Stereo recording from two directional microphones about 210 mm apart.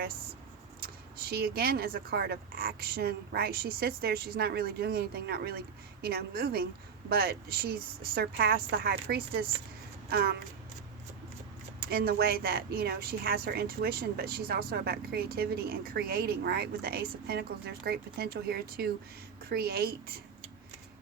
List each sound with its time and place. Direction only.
0.8 s speech: 45° right (ahead or behind)
11.8 s speech: 45° right (ahead or behind)